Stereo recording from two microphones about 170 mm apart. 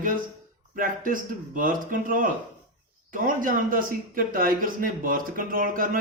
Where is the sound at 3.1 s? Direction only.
50° right (ahead or behind).